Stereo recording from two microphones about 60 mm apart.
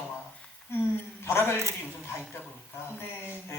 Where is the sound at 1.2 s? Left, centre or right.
Left.